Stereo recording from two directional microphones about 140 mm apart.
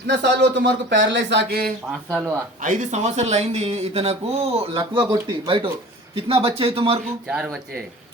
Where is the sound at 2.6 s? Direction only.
60° right (ahead or behind); by 4.7 s 45° right (ahead or behind).